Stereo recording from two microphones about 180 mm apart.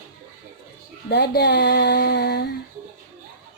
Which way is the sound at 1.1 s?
65° left (ahead or behind).